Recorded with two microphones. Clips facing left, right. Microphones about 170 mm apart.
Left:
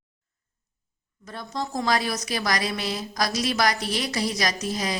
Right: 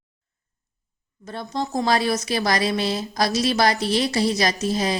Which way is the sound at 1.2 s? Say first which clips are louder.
Right 4 dB; 30° right (ahead or behind).